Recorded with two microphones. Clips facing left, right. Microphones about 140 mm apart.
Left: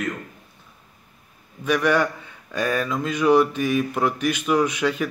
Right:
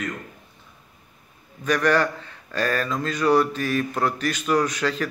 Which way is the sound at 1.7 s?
10° left (ahead or behind).